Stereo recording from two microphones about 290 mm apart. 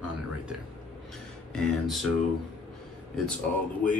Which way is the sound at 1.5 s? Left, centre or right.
Centre.